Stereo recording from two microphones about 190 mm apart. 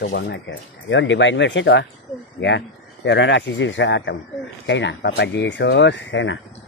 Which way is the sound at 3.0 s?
70° left (ahead or behind).